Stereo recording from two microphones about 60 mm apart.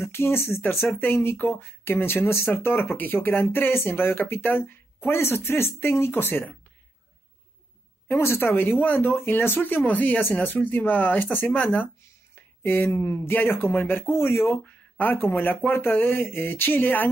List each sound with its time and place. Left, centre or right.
0.0 s speech: left
0.6 s speech: left
8.1 s speech: left